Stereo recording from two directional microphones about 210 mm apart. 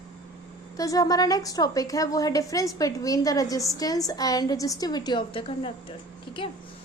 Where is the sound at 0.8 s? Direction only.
15° left (ahead or behind).